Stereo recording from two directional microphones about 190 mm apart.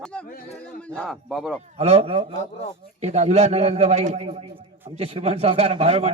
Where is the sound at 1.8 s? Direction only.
35° right (ahead or behind).